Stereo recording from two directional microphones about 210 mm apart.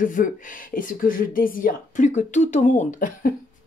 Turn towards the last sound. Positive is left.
turn(degrees=40)  # may be behind; listen again after turning